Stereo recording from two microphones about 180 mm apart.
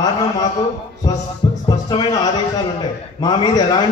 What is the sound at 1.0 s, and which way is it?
Speech, 20° left (ahead or behind).